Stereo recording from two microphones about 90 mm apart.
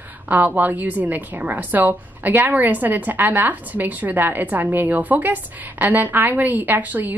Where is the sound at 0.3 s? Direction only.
20° right (ahead or behind).